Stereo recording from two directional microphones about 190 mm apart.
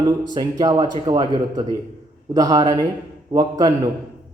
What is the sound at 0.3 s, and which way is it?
A man's voice, 20° right (ahead or behind).